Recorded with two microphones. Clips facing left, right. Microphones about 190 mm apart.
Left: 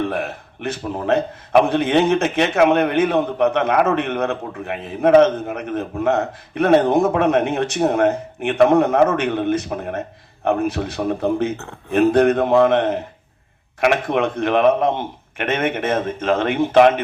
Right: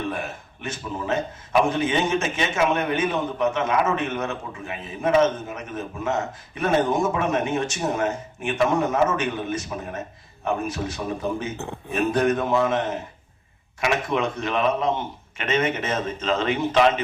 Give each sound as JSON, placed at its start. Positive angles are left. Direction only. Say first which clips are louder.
{"t": 0.1, "sound": "a man's voice", "louder": "left 6 dB", "side_deg": 65}